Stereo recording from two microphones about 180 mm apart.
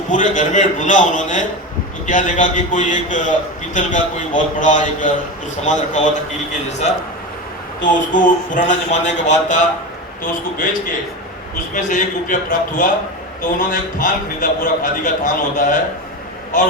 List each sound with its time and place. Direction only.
0.1 s a man's voice: 45° left (ahead or behind)
11.7 s speech: 45° left (ahead or behind)